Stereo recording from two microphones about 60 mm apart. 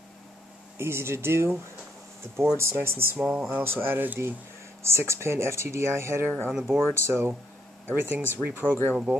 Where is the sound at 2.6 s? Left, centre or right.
Right.